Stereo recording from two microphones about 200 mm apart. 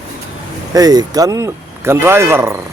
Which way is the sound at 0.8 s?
20° right (ahead or behind).